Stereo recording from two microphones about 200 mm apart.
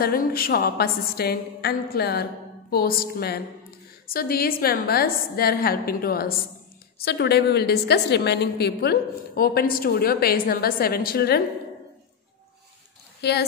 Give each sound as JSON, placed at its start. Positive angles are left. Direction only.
{"t": 0.0, "sound": "a woman's voice", "side_deg": 45}
{"t": 13.2, "sound": "speech", "side_deg": 55}